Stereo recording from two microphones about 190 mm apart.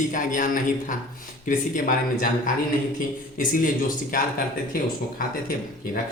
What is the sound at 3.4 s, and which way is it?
Speech, 45° left (ahead or behind).